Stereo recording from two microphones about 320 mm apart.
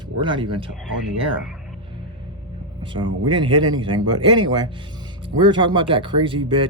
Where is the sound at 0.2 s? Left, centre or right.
Centre.